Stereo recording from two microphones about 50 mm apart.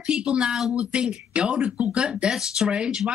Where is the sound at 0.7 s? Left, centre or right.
Right.